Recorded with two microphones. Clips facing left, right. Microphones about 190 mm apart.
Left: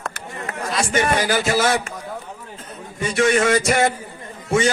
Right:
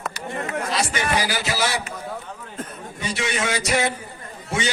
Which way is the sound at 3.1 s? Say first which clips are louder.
Left 9 dB; 55° left (ahead or behind).